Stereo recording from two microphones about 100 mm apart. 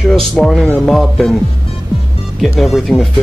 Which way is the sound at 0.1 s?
5° left (ahead or behind).